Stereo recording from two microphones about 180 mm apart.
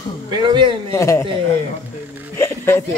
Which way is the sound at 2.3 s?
15° left (ahead or behind).